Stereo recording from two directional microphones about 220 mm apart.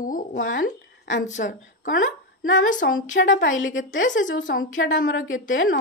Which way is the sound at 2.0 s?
60° left (ahead or behind).